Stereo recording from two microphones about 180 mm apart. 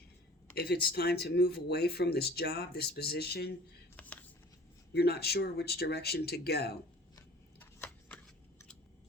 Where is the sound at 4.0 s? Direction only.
5° left (ahead or behind).